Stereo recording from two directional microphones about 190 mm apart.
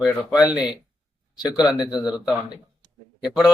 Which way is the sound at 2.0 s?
5° right (ahead or behind).